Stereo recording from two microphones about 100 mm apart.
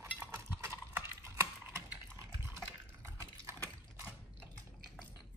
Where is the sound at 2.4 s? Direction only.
25° right (ahead or behind).